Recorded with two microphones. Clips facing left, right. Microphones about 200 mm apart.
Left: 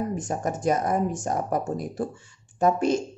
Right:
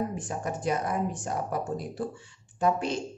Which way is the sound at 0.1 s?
45° left (ahead or behind).